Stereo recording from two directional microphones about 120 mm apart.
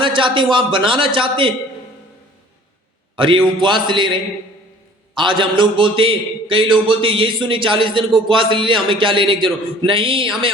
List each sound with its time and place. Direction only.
0.0 s a man's voice: 45° right (ahead or behind)
3.2 s a man's voice: 45° right (ahead or behind)
5.1 s a man's voice: 40° right (ahead or behind)